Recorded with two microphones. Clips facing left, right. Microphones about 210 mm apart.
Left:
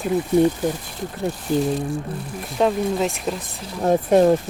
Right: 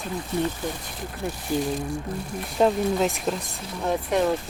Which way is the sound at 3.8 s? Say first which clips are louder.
Left 8 dB; 40° left (ahead or behind).